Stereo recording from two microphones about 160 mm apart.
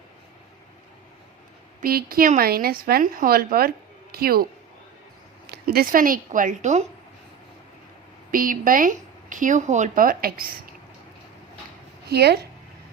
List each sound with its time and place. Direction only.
1.8 s speech: 70° right (ahead or behind)
5.6 s speech: 65° right (ahead or behind); by 6.8 s 45° right (ahead or behind)
8.3 s speech: 60° right (ahead or behind)
12.0 s speech: 90° right